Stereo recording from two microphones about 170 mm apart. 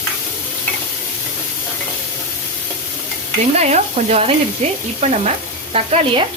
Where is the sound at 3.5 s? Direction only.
40° right (ahead or behind).